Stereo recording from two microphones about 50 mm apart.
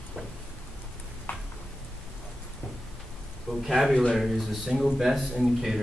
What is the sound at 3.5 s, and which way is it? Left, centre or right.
A man's voice, centre.